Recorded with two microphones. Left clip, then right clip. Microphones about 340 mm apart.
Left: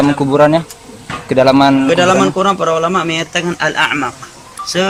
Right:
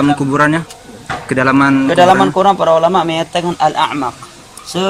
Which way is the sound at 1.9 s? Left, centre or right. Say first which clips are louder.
Right 2 dB; right.